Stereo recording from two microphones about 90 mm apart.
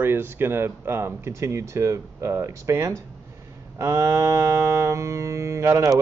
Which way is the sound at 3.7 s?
35° right (ahead or behind).